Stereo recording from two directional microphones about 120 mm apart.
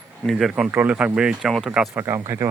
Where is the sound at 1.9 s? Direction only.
20° right (ahead or behind).